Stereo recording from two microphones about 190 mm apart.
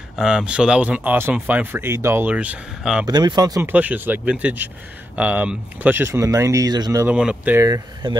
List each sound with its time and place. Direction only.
0.2 s speech: 5° right (ahead or behind)
3.1 s speech: 20° right (ahead or behind)
3.7 s speech: 10° right (ahead or behind)